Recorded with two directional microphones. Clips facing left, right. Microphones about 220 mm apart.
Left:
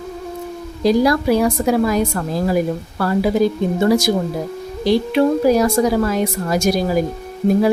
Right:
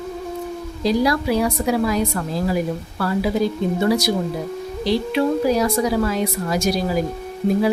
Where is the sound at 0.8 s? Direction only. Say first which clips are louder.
Left 4 dB; 50° left (ahead or behind).